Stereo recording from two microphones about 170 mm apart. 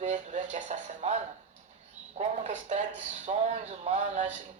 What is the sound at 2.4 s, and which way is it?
A man's voice, 45° right (ahead or behind).